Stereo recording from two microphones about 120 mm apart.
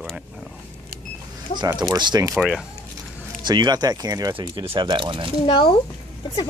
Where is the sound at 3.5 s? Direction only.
35° right (ahead or behind).